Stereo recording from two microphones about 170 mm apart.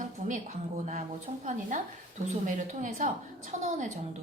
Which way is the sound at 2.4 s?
50° right (ahead or behind).